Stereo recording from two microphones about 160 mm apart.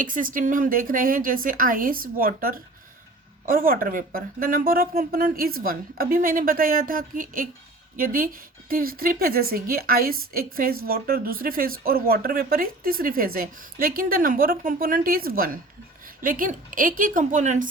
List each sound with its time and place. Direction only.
0.0 s a woman's voice: 60° right (ahead or behind)